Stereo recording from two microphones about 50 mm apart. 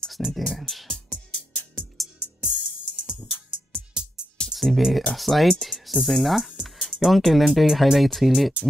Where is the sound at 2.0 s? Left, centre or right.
Centre.